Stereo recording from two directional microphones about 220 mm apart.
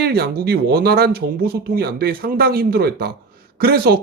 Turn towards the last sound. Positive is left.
turn(degrees=-45)  # may be behind; listen again after turning